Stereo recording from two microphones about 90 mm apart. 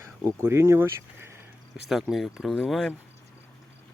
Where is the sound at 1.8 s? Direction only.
10° right (ahead or behind).